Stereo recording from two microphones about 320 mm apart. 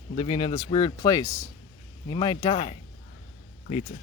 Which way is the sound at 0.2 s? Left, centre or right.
Centre.